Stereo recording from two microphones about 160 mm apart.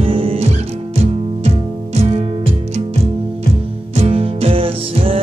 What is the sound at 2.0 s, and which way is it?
Music, 40° right (ahead or behind).